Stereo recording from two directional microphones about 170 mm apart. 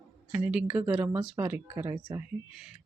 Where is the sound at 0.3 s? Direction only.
10° right (ahead or behind).